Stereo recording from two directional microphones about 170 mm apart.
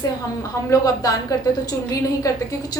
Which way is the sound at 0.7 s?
20° left (ahead or behind).